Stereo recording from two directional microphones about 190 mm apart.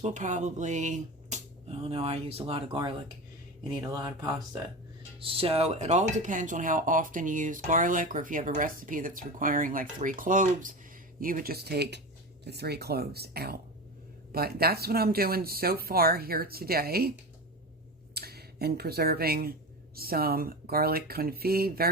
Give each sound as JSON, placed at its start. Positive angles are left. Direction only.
{"t": 0.0, "sound": "speech", "side_deg": -40}
{"t": 5.2, "sound": "speech", "side_deg": -30}
{"t": 18.1, "sound": "speech", "side_deg": -55}